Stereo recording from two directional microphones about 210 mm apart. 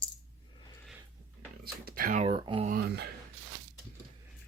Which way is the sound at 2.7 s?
45° right (ahead or behind).